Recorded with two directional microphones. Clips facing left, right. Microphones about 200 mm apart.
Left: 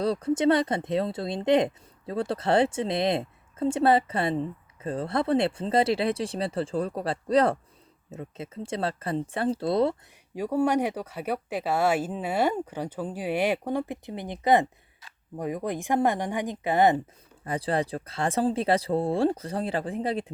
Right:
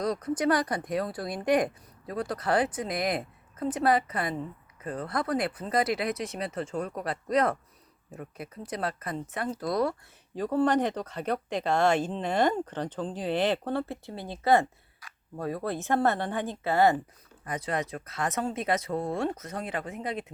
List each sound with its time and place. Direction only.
0.0 s speech: 30° left (ahead or behind)
10.3 s speech: 10° left (ahead or behind)
17.4 s speech: 30° left (ahead or behind)